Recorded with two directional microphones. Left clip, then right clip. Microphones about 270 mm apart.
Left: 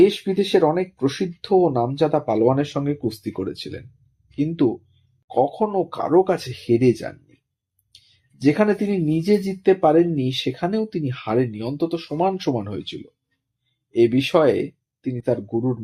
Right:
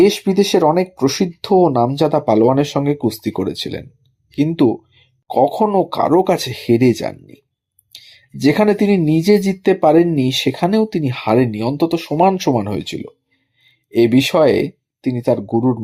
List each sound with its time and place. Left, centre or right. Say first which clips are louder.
0.0 s speech: right 4 dB; right
8.4 s speech: right 5 dB; right